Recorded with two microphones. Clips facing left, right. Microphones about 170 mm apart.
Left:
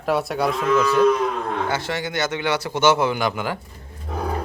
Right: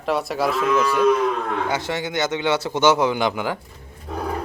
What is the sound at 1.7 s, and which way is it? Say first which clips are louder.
Speech: right 1 dB; 20° right (ahead or behind).